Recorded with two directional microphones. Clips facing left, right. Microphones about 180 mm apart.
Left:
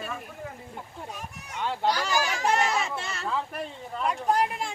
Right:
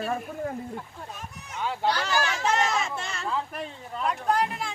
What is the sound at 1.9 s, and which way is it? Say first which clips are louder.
Speech: even; 10° left (ahead or behind).